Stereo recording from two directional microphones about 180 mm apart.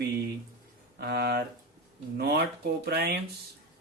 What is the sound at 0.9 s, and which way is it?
Speech, 65° right (ahead or behind).